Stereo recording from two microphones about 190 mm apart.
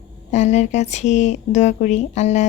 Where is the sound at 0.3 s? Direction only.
40° left (ahead or behind).